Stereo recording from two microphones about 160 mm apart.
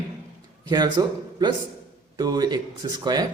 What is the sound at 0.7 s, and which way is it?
Speech, 25° right (ahead or behind).